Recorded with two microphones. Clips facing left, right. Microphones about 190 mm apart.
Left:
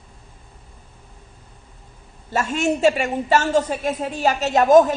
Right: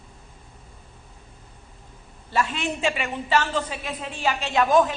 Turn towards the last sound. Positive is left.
turn(degrees=45)  # may be behind; listen again after turning